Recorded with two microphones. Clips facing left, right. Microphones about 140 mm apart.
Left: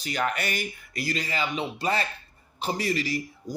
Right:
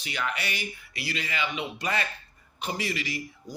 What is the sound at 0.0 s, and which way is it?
Speech, 45° left (ahead or behind).